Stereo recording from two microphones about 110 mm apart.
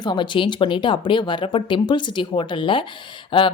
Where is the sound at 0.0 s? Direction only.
45° left (ahead or behind).